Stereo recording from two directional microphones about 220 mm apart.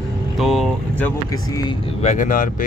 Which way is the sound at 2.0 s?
35° left (ahead or behind).